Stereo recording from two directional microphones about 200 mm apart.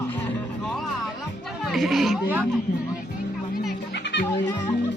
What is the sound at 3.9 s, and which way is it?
Music, 60° left (ahead or behind).